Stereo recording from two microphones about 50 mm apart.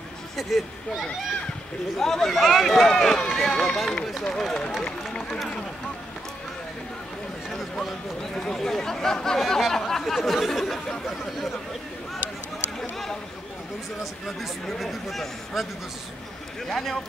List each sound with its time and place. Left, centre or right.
0.4 s a man's voice: centre
2.0 s a man's voice: centre
7.8 s a man's voice: centre
14.2 s a man's voice: centre
16.6 s speech: centre